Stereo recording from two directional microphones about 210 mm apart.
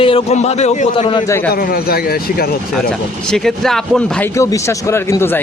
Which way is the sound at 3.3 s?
Centre (ahead or behind).